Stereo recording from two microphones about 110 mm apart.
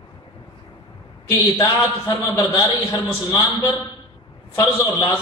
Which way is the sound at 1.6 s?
30° left (ahead or behind).